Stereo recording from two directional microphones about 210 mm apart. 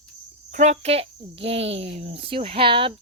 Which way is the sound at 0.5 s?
30° right (ahead or behind).